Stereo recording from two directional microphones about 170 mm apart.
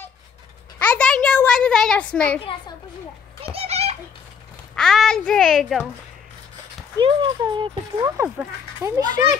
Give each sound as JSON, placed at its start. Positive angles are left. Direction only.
{"t": 0.9, "sound": "a sound", "side_deg": 5}
{"t": 3.5, "sound": "children playing", "side_deg": -35}
{"t": 4.7, "sound": "a child's voice", "side_deg": 5}
{"t": 7.0, "sound": "a child's voice", "side_deg": -25}